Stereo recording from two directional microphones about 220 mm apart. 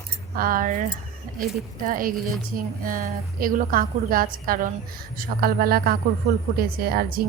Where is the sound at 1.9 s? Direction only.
40° right (ahead or behind).